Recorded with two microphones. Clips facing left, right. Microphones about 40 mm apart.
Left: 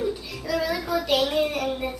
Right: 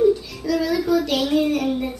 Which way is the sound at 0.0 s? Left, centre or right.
Centre.